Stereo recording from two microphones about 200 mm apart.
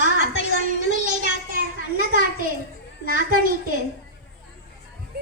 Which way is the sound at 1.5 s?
45° right (ahead or behind).